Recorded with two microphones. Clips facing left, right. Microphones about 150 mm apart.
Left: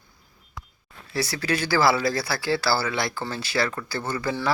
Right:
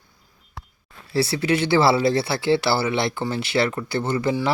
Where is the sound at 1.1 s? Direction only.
30° right (ahead or behind).